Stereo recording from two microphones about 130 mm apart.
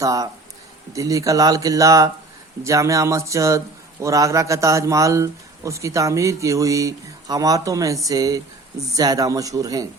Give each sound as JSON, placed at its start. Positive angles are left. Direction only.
{"t": 0.0, "sound": "speech", "side_deg": -25}